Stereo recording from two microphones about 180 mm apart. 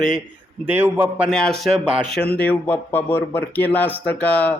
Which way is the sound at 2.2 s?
10° left (ahead or behind).